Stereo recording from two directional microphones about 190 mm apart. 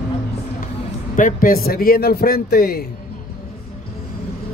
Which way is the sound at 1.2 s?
45° left (ahead or behind).